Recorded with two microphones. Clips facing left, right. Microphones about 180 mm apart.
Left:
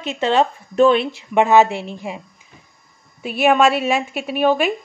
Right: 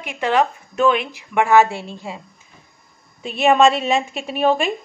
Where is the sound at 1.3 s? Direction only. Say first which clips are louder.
Left 1 dB; 20° left (ahead or behind).